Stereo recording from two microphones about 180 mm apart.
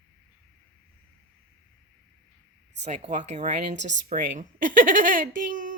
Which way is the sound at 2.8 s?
40° right (ahead or behind).